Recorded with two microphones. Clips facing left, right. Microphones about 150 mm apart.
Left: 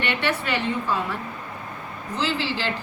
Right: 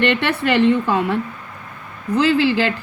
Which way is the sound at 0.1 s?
70° right (ahead or behind).